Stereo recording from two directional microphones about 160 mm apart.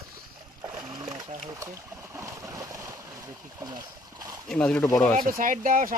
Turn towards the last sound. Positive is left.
turn(degrees=-60)  # may be behind; listen again after turning